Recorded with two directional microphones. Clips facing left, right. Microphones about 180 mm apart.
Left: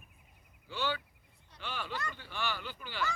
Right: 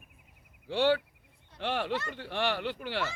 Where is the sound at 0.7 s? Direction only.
75° right (ahead or behind).